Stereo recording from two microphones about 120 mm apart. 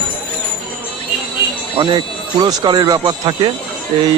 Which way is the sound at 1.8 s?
40° right (ahead or behind).